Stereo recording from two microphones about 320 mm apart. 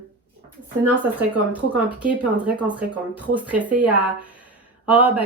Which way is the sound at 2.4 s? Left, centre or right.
Centre.